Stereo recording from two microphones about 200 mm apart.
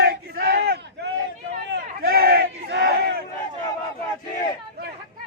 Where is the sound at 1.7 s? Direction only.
50° right (ahead or behind).